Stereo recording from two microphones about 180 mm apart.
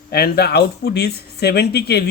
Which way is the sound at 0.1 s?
60° left (ahead or behind).